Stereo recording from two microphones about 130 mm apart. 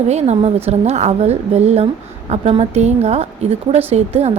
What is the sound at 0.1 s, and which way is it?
A woman's voice, 55° right (ahead or behind).